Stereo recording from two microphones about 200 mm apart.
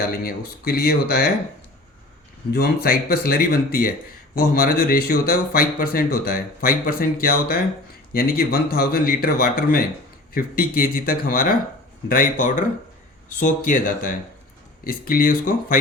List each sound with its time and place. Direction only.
0.2 s speech: 50° left (ahead or behind)
2.5 s speech: 50° left (ahead or behind)